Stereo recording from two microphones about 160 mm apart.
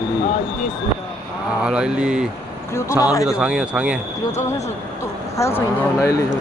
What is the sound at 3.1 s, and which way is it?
Speech, 20° left (ahead or behind).